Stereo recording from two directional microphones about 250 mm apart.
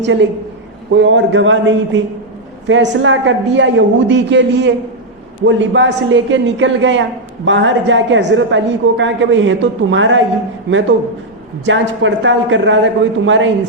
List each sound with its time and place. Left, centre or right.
0.0 s a woman's voice: right